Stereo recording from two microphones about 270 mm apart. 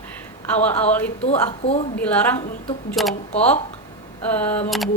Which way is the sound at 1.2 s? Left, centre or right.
Left.